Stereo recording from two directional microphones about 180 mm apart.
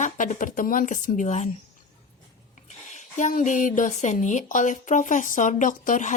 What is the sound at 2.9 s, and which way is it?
Speech, 45° left (ahead or behind).